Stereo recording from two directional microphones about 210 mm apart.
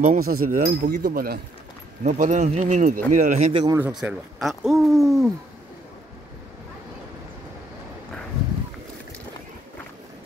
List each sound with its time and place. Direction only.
0.0 s speech: 40° right (ahead or behind)
3.6 s speech: 15° right (ahead or behind)
4.0 s speech: centre (ahead or behind)